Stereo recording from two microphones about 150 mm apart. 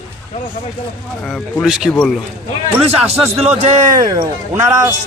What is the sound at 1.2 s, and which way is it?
Speech, 10° left (ahead or behind).